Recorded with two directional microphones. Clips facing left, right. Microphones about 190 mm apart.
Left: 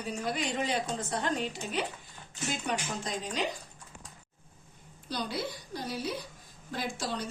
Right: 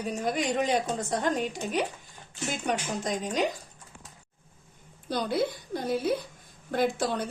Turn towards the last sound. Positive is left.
turn(degrees=-55)  # may be behind; listen again after turning